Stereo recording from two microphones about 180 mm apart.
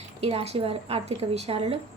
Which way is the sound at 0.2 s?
35° right (ahead or behind).